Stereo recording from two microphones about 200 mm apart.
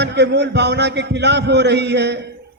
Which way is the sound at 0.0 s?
60° right (ahead or behind).